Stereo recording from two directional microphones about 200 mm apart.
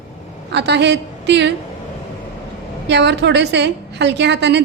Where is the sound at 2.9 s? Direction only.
60° right (ahead or behind).